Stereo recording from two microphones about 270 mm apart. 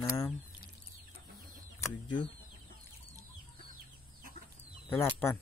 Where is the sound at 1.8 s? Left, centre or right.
Centre.